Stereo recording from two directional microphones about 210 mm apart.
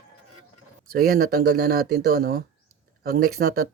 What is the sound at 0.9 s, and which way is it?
Speech, 45° right (ahead or behind).